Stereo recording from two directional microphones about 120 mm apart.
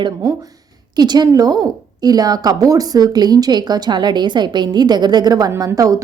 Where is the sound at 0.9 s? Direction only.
35° right (ahead or behind).